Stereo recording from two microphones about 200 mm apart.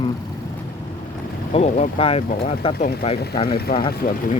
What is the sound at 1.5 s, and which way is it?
Speech, 30° left (ahead or behind).